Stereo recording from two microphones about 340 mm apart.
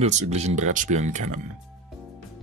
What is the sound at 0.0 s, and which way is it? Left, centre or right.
Speech, centre.